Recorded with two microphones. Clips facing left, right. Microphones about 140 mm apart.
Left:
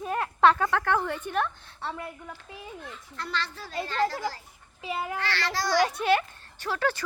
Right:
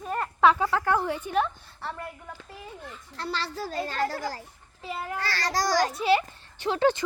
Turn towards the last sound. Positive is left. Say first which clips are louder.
# right 5 dB
turn(degrees=-25)  # may be behind; listen again after turning